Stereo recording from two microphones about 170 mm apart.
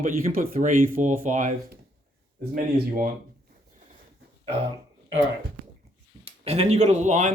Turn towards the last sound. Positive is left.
turn(degrees=-45)  # may be behind; listen again after turning